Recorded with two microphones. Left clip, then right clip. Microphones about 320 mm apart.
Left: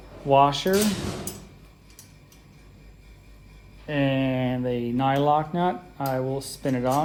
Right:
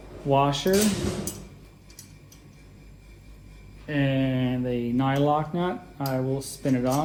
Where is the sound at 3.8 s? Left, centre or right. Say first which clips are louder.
Left 2 dB; left.